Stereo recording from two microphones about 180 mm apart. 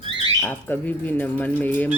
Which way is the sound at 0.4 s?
10° left (ahead or behind).